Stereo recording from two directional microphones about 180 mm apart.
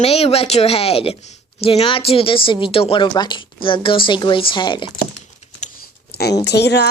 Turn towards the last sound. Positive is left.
turn(degrees=70)  # may be behind; listen again after turning